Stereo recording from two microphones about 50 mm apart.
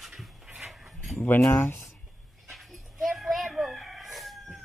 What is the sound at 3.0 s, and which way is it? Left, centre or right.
Chicken, centre.